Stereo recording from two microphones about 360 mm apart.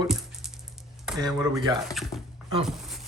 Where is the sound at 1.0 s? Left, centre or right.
Centre.